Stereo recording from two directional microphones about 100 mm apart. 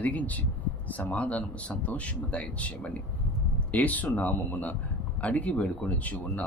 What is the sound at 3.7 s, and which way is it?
Speech, 15° left (ahead or behind).